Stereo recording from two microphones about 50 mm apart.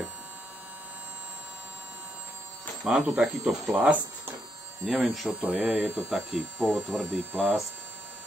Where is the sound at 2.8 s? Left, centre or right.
Centre.